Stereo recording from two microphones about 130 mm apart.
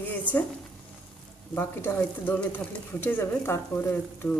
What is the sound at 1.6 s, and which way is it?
Speech, 15° left (ahead or behind).